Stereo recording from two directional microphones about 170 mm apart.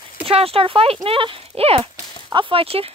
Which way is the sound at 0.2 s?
35° right (ahead or behind).